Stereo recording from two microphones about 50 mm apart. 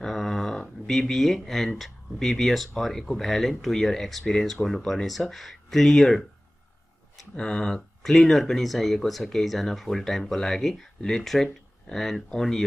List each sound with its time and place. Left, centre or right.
0.0 s a sound: centre
1.8 s speech: centre
7.3 s speech: centre
8.0 s speech: centre